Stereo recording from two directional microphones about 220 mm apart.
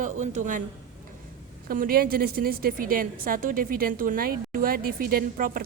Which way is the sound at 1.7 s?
40° right (ahead or behind).